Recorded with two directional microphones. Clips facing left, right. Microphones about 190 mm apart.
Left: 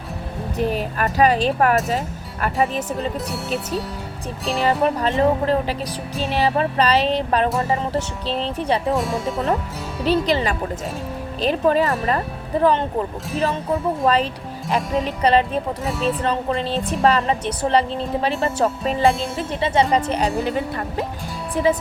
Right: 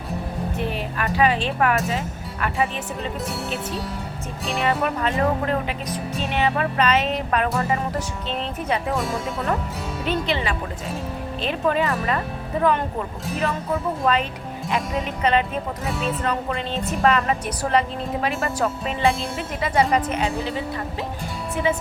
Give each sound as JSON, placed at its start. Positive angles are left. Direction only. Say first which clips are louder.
{"t": 0.5, "sound": "speech", "louder": "left 8 dB", "side_deg": 40}
{"t": 3.3, "sound": "speech", "louder": "left 3 dB", "side_deg": 0}
{"t": 4.6, "sound": "speech", "louder": "left 4 dB", "side_deg": 30}
{"t": 8.9, "sound": "speech", "louder": "left 4 dB", "side_deg": 0}
{"t": 10.0, "sound": "speech", "louder": "left 6 dB", "side_deg": 35}
{"t": 14.0, "sound": "speech", "louder": "left 3 dB", "side_deg": 35}
{"t": 15.9, "sound": "speech", "louder": "left 4 dB", "side_deg": 0}
{"t": 16.2, "sound": "speech", "louder": "left 3 dB", "side_deg": 30}
{"t": 19.4, "sound": "music", "louder": "left 3 dB", "side_deg": 30}
{"t": 20.1, "sound": "speech", "louder": "left 3 dB", "side_deg": 35}
{"t": 21.5, "sound": "speech", "louder": "left 4 dB", "side_deg": 35}